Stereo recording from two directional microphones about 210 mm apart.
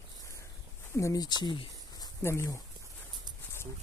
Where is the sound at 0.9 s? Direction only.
15° left (ahead or behind).